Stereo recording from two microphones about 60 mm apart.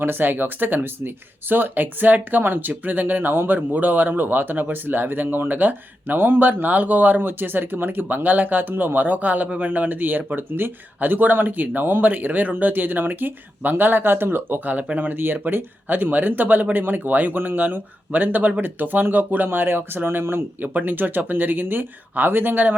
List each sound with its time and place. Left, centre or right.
0.0 s speech: right